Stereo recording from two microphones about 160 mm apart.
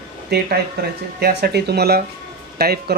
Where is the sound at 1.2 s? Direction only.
90° right.